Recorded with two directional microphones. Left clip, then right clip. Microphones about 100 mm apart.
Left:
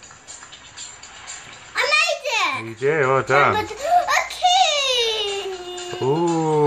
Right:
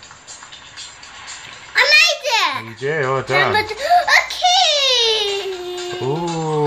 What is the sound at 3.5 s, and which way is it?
Baby laughter, 30° right (ahead or behind).